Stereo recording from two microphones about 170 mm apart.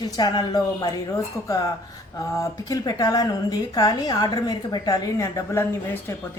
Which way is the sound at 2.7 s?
25° left (ahead or behind).